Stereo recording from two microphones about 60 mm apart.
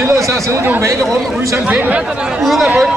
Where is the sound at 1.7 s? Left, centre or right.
Right.